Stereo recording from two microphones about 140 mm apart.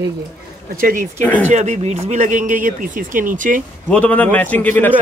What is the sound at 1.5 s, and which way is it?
Speech, 55° right (ahead or behind).